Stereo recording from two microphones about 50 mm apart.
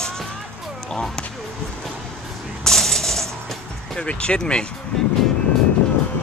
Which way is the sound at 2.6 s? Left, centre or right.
Centre.